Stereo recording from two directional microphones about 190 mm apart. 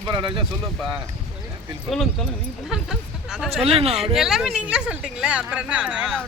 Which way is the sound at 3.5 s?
30° right (ahead or behind).